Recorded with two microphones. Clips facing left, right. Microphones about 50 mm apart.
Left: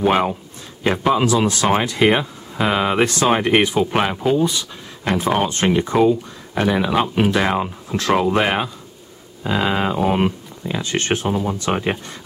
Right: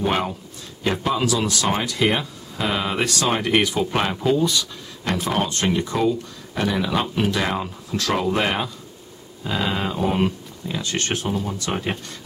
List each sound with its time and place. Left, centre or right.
0.0 s speech: left